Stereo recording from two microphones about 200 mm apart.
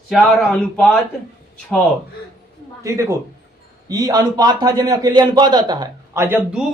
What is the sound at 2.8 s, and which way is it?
A man's voice, 15° right (ahead or behind).